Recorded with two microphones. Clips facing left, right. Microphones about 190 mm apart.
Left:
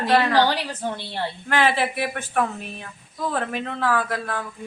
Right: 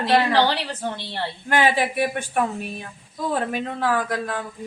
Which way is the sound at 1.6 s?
15° right (ahead or behind).